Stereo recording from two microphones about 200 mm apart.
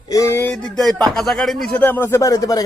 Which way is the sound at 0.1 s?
15° left (ahead or behind).